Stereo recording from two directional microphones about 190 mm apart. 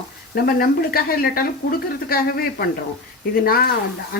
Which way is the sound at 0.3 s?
55° left (ahead or behind).